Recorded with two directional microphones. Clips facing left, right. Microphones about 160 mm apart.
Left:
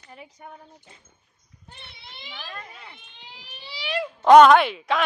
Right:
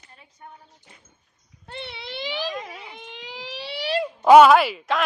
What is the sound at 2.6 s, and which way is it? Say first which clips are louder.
Fire alarm: right 6 dB; 90° right.